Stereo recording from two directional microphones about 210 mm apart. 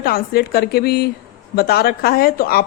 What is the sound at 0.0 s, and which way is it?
Speech, 45° left (ahead or behind).